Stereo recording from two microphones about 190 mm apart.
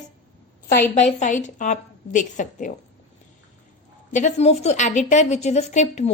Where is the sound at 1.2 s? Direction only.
40° left (ahead or behind).